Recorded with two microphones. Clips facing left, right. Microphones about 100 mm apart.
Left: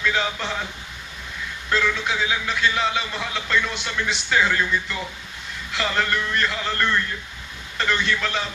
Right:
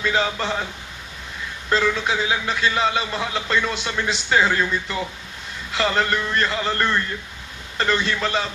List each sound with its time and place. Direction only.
0.0 s a man's voice: 35° right (ahead or behind)
1.7 s a man's voice: 35° right (ahead or behind)